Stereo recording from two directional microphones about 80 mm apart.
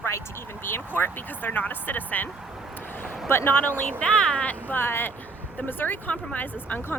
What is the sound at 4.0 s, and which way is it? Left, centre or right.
Speech, centre.